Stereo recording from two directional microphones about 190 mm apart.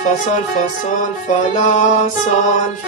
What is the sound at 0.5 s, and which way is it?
Music, 40° left (ahead or behind).